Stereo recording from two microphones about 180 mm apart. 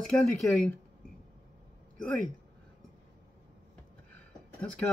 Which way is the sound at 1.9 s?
5° left (ahead or behind).